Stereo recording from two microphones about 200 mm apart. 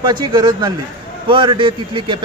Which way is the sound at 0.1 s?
20° right (ahead or behind).